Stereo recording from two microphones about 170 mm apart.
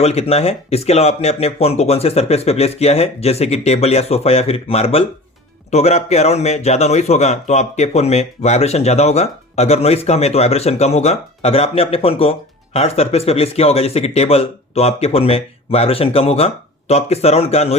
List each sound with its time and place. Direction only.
0.0 s speech: 35° left (ahead or behind)